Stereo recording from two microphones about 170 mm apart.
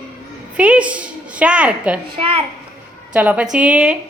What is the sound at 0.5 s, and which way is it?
A woman's voice, 10° right (ahead or behind).